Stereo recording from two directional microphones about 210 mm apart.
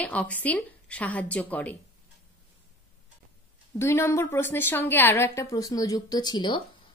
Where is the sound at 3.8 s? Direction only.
10° left (ahead or behind).